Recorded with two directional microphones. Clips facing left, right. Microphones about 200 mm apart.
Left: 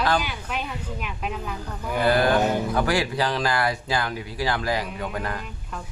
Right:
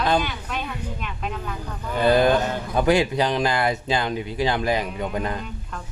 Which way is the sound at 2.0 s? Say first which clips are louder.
Right 2 dB; 20° right (ahead or behind).